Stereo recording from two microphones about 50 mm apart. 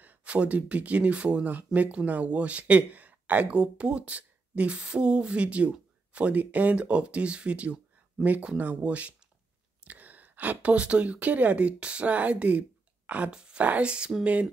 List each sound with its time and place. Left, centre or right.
0.2 s speech: right
13.0 s a sound: right
13.3 s speech: centre